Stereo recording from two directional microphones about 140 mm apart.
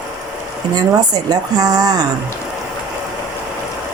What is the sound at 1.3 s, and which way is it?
Speech, 25° right (ahead or behind).